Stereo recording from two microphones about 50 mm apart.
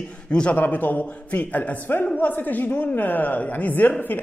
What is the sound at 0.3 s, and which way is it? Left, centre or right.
Speech, left.